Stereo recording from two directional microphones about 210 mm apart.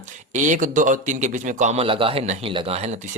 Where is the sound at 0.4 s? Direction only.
40° right (ahead or behind).